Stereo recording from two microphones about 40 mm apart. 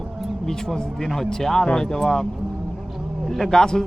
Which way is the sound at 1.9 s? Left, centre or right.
Centre.